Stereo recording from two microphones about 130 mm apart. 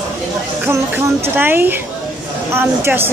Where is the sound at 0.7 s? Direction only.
15° right (ahead or behind).